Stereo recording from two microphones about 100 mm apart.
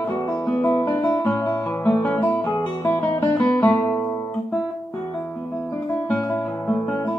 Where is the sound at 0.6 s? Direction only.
20° left (ahead or behind).